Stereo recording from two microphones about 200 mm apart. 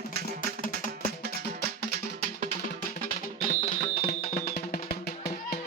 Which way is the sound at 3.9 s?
45° left (ahead or behind).